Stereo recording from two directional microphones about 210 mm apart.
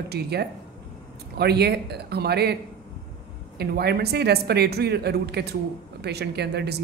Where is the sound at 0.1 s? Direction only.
50° right (ahead or behind).